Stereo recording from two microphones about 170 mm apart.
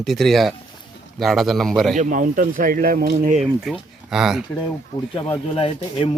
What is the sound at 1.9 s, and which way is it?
Speech, 50° right (ahead or behind).